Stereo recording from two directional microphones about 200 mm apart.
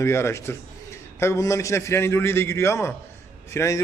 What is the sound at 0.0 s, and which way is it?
A man's voice, 15° left (ahead or behind).